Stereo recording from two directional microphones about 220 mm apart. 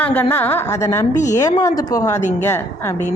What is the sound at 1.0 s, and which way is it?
Speech, 35° left (ahead or behind).